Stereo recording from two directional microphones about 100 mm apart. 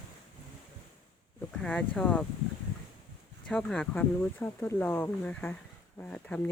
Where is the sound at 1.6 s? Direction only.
10° left (ahead or behind).